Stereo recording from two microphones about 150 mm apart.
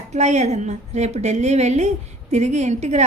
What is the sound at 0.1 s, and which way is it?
A woman's voice, 50° right (ahead or behind).